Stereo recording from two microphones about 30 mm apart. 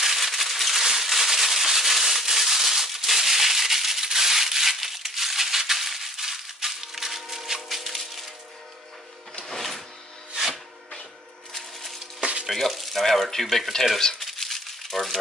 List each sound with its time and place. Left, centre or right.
0.0 s a sound: centre
8.0 s coin: centre
9.5 s music: centre
10.5 s a sound: centre
12.4 s speech: centre
14.2 s crumpling: centre